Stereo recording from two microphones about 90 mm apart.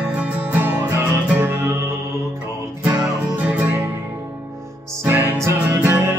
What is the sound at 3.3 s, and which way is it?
Music, 20° right (ahead or behind).